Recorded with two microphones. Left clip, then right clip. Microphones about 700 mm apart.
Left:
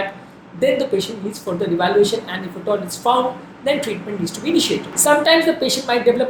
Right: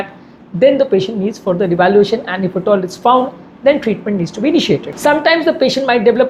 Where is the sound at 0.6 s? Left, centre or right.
Right.